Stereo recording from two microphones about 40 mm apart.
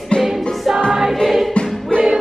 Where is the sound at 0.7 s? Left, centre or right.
Centre.